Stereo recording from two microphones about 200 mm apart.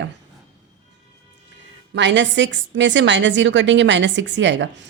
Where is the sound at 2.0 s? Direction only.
65° right (ahead or behind).